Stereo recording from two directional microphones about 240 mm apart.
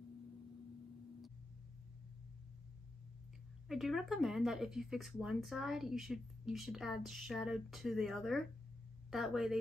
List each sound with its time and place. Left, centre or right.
3.6 s speech: centre